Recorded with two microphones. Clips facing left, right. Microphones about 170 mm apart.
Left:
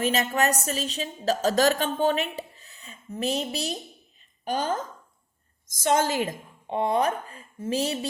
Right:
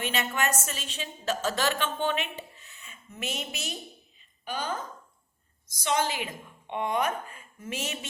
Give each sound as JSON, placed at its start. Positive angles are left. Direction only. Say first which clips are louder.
{"t": 0.0, "sound": "a woman's voice", "louder": "left 5 dB", "side_deg": 40}